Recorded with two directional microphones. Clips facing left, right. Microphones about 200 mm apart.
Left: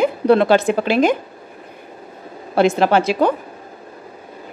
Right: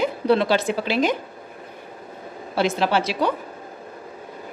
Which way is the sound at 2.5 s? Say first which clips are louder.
Left 6 dB; 50° left (ahead or behind).